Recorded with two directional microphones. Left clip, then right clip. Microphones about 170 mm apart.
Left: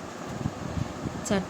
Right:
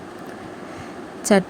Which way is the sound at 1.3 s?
40° right (ahead or behind).